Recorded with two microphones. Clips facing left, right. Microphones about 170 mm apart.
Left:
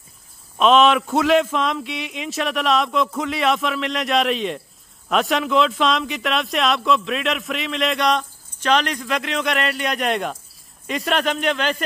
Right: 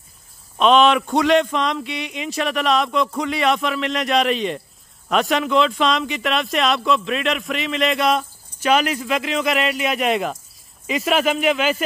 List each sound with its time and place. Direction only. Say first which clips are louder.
0.6 s a man's voice: even; centre (ahead or behind)